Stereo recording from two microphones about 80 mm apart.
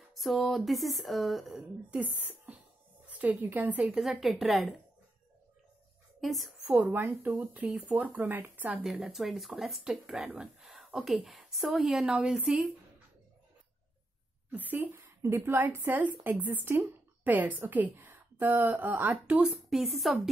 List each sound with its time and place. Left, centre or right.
0.1 s speech: centre
1.5 s a woman's voice: centre
3.1 s a sound: centre
3.4 s a woman's voice: right
3.9 s speech: centre
6.2 s a woman's voice: centre
6.7 s a woman's voice: right
8.7 s speech: centre
14.5 s a woman's voice: right
19.4 s speech: centre